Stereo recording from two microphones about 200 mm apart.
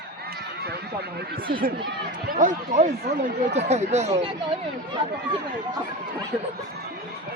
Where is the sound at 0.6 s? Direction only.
50° right (ahead or behind); by 4.1 s 35° right (ahead or behind).